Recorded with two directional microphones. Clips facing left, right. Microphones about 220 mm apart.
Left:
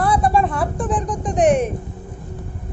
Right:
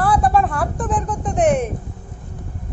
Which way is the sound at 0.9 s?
15° left (ahead or behind).